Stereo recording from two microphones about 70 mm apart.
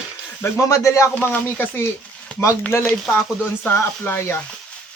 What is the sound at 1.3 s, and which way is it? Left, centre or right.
Speech, left.